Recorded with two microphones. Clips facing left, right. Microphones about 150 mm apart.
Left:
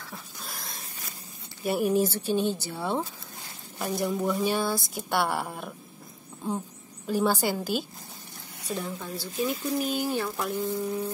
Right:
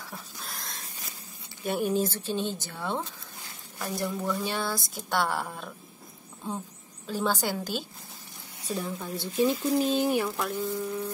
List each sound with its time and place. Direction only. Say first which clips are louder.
0.4 s a sound: even; centre (ahead or behind)
1.6 s speech: left 3 dB; 5° left (ahead or behind)
7.1 s speech: left 3 dB; 10° left (ahead or behind)
8.7 s a woman's voice: right 1 dB; 10° right (ahead or behind)
9.1 s speech: right 5 dB; 25° right (ahead or behind)
10.3 s speech: left 1 dB; 10° left (ahead or behind)